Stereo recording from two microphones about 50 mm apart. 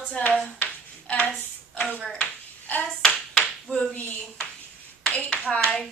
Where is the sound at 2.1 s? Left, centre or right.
Left.